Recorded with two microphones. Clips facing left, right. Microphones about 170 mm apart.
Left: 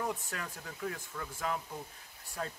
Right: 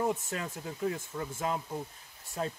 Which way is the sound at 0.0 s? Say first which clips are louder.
Right 6 dB; 25° right (ahead or behind).